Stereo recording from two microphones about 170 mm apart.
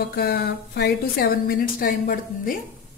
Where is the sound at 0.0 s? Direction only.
75° left (ahead or behind).